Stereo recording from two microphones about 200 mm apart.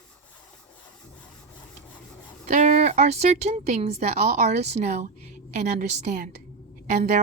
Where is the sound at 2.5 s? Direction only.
35° right (ahead or behind).